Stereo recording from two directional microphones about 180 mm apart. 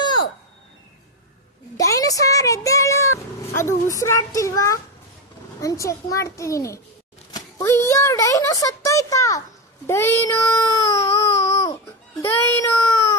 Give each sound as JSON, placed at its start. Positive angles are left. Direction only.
{"t": 1.7, "sound": "a child's voice", "side_deg": 20}
{"t": 7.3, "sound": "a sound", "side_deg": 15}
{"t": 7.9, "sound": "a child's voice", "side_deg": 15}